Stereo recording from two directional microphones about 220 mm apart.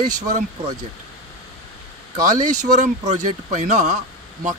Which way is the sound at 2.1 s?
35° right (ahead or behind).